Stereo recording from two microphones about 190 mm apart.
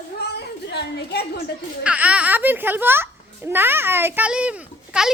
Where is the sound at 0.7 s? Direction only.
60° left (ahead or behind).